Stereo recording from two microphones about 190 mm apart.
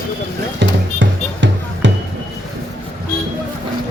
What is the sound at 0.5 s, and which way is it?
Music, 75° right (ahead or behind).